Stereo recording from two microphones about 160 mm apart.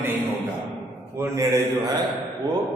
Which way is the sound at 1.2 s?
20° right (ahead or behind).